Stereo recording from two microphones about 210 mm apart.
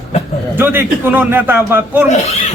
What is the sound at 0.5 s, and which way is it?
A man's voice, 10° right (ahead or behind).